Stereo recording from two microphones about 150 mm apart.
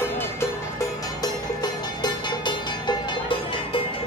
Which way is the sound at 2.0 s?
30° left (ahead or behind).